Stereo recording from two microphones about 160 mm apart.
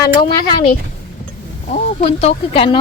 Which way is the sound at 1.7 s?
40° left (ahead or behind).